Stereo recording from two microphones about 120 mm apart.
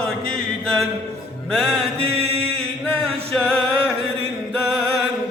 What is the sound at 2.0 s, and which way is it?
Mantra, 55° right (ahead or behind).